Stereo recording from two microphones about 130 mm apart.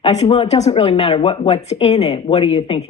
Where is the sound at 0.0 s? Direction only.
55° left (ahead or behind).